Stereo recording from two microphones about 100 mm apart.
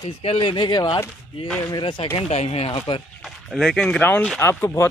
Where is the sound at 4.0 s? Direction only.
15° left (ahead or behind).